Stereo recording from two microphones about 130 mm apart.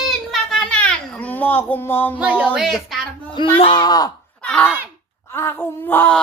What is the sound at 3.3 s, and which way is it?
Speech, 40° left (ahead or behind).